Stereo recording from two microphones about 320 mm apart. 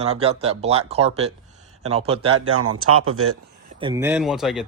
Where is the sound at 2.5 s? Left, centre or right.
Right.